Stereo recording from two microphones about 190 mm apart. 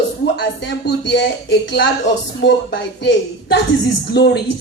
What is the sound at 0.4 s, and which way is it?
A woman's voice, 65° left (ahead or behind).